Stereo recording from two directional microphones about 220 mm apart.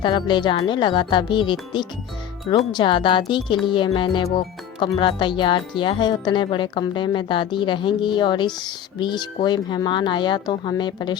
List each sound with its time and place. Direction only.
0.0 s speech: 20° left (ahead or behind)
2.7 s speech: 20° left (ahead or behind)